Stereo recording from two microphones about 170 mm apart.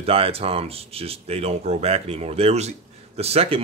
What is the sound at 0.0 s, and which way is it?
Speech, 35° right (ahead or behind).